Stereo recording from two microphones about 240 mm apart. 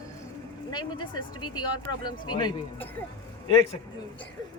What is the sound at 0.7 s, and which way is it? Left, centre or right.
A man's voice, centre.